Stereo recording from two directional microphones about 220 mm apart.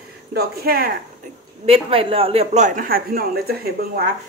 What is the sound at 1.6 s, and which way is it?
A man's voice, 25° right (ahead or behind).